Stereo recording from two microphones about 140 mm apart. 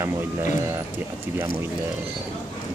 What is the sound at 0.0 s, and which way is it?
Speech, 20° right (ahead or behind).